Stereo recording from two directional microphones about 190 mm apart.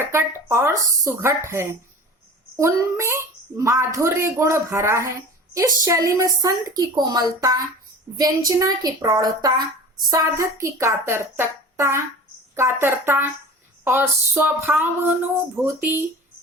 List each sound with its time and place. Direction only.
0.0 s a woman's voice: 15° right (ahead or behind)